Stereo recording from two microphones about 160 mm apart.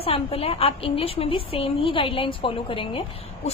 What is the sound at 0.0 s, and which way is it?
A woman's voice, 35° left (ahead or behind).